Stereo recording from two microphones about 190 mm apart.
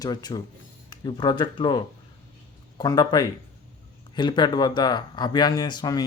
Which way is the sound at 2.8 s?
20° left (ahead or behind).